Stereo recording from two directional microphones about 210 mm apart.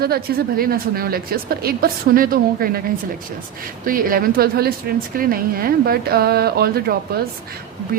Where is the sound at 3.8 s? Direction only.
45° right (ahead or behind).